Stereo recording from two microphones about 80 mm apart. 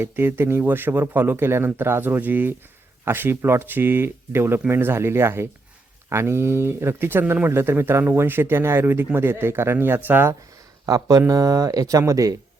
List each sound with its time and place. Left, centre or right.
0.0 s speech: right
10.8 s speech: right